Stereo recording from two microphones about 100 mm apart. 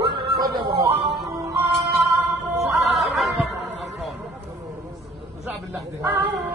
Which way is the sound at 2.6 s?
Centre (ahead or behind).